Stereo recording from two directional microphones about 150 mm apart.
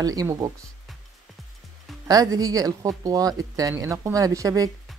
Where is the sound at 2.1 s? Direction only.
25° right (ahead or behind).